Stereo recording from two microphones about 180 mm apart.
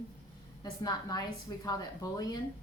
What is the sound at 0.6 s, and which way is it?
A woman's voice, 20° left (ahead or behind).